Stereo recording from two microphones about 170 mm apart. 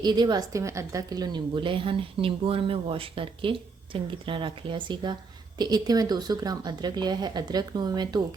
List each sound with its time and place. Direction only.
0.0 s a woman's voice: 25° right (ahead or behind)